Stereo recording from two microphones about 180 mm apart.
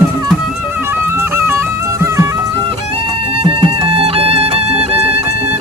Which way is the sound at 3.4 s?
30° right (ahead or behind).